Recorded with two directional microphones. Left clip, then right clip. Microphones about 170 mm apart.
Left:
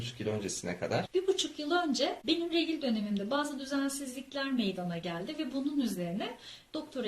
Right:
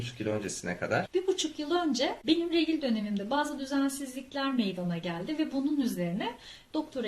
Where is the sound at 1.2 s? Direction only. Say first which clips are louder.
Right 1 dB; 10° right (ahead or behind).